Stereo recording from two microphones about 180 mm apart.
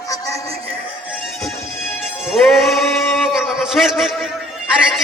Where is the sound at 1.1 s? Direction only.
5° right (ahead or behind).